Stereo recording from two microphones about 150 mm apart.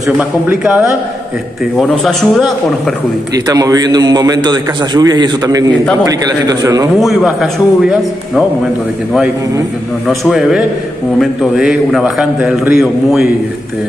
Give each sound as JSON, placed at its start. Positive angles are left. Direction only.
{"t": 0.0, "sound": "a man's voice", "side_deg": -10}
{"t": 1.8, "sound": "a man's voice", "side_deg": 0}
{"t": 3.3, "sound": "a man's voice", "side_deg": -25}
{"t": 7.0, "sound": "a man's voice", "side_deg": 0}
{"t": 10.0, "sound": "a man's voice", "side_deg": 0}